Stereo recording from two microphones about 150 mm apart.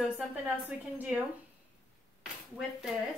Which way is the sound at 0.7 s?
10° right (ahead or behind).